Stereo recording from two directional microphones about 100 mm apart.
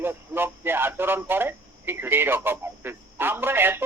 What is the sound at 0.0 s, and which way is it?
A man's voice, 20° right (ahead or behind).